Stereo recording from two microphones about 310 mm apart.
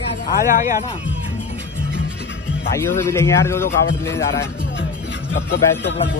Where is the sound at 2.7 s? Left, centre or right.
Centre.